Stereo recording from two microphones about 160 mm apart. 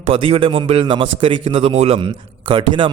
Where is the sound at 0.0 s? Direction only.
35° right (ahead or behind).